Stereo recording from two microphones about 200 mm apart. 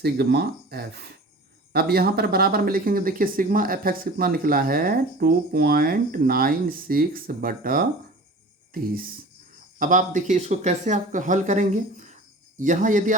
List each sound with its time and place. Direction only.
0.0 s speech: 55° right (ahead or behind)
9.7 s speech: 40° right (ahead or behind)